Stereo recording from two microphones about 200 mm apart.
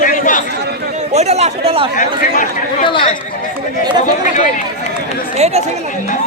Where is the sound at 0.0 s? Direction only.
40° left (ahead or behind).